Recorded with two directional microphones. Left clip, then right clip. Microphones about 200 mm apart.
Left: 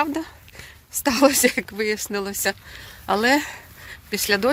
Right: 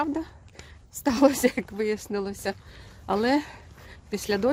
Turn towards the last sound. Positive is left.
turn(degrees=-5)  # may be behind; listen again after turning